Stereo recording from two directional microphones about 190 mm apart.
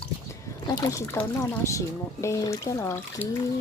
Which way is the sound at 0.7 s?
20° left (ahead or behind).